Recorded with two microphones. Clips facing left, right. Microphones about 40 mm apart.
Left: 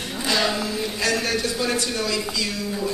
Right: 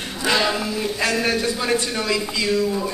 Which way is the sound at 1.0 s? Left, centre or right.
Right.